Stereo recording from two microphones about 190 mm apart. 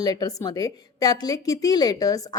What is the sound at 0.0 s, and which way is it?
A woman's voice, 20° left (ahead or behind).